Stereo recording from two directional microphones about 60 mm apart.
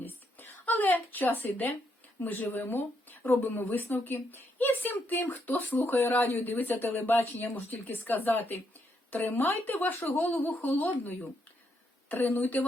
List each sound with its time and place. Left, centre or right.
0.0 s a sound: left
2.2 s speech: left
6.0 s speech: left
12.1 s a woman's voice: left